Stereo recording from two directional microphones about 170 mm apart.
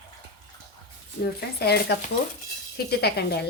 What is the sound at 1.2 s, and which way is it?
Speech, 65° left (ahead or behind).